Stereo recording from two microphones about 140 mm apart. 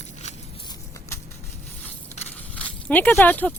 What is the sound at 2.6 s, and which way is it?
Speech, 10° left (ahead or behind).